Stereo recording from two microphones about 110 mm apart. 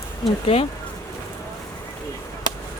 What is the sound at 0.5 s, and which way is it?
Speech, 55° left (ahead or behind).